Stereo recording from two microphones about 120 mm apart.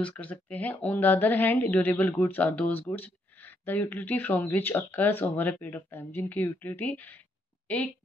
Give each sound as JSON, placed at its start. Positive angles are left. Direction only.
{"t": 0.0, "sound": "a woman's voice", "side_deg": 15}